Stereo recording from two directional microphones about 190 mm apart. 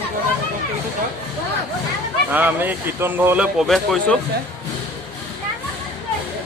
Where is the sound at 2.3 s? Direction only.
10° right (ahead or behind).